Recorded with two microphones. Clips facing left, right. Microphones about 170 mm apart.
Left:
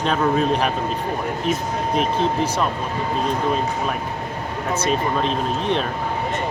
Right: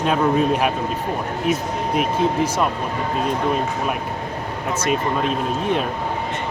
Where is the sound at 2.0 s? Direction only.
10° right (ahead or behind).